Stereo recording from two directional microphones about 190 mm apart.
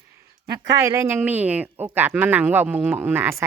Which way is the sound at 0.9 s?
15° right (ahead or behind).